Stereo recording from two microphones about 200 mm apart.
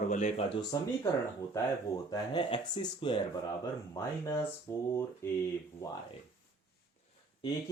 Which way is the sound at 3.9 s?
15° left (ahead or behind).